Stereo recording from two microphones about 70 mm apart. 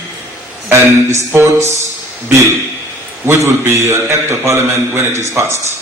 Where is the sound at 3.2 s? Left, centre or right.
Right.